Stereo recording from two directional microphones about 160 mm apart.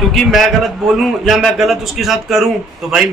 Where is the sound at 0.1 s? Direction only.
Centre (ahead or behind).